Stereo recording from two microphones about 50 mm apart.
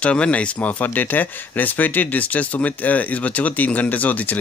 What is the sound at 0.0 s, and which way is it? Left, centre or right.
Speech, left.